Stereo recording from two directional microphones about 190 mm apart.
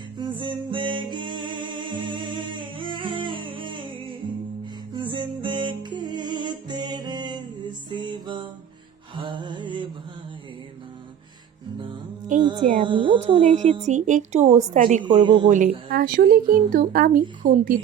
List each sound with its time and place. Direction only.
0.2 s music: 25° right (ahead or behind)
12.5 s a sound: 45° right (ahead or behind)
12.8 s speech: 25° right (ahead or behind)
13.1 s a woman's voice: 35° right (ahead or behind)
15.2 s speech: 25° right (ahead or behind)
15.4 s speech: 40° right (ahead or behind)